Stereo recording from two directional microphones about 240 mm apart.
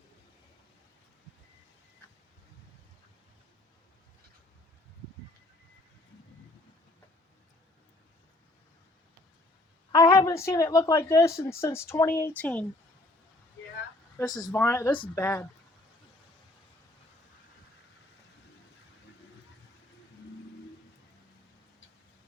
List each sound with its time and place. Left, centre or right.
9.9 s a woman's voice: centre
14.2 s a woman's voice: centre